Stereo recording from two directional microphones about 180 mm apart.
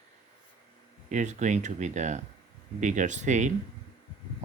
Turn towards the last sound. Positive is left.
turn(degrees=-40)  # may be behind; listen again after turning